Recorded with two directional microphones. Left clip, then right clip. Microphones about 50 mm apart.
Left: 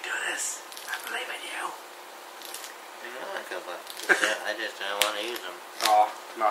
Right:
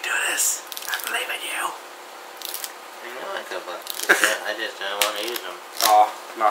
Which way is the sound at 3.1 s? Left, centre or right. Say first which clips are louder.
Right 5 dB; left.